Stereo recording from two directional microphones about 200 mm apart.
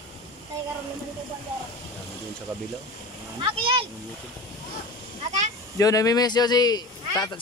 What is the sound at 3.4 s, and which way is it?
Speech, 25° right (ahead or behind).